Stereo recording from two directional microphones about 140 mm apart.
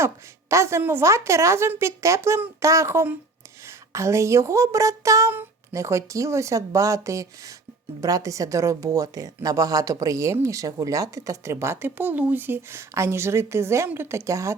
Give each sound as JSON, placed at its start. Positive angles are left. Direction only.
{"t": 0.0, "sound": "speech", "side_deg": -20}